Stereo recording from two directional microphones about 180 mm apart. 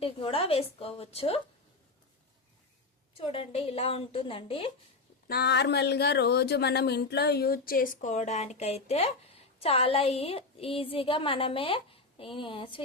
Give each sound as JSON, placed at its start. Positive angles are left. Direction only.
{"t": 0.0, "sound": "a woman's voice", "side_deg": 30}
{"t": 3.2, "sound": "a woman's voice", "side_deg": 30}
{"t": 5.3, "sound": "a woman's voice", "side_deg": 65}